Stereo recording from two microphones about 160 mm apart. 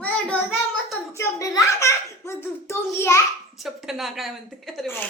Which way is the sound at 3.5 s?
Centre (ahead or behind).